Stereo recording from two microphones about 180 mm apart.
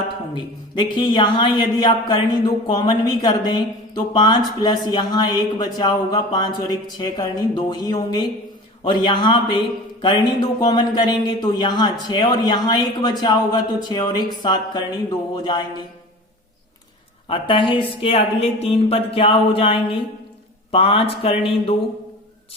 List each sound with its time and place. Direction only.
0.3 s speech: 25° left (ahead or behind)
17.2 s a man's voice: 30° left (ahead or behind)